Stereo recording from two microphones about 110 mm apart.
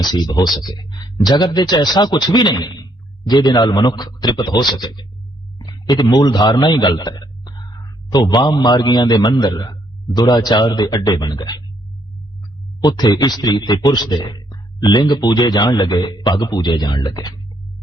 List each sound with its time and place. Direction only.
0.0 s a man's voice: 40° left (ahead or behind)
12.8 s a man's voice: 40° left (ahead or behind)